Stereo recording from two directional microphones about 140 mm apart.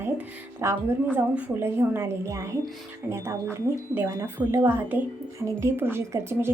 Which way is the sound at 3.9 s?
15° right (ahead or behind).